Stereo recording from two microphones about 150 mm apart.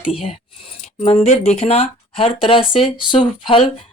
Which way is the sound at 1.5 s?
45° left (ahead or behind).